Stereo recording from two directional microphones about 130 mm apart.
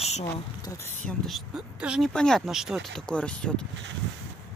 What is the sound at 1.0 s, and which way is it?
Speech, centre (ahead or behind).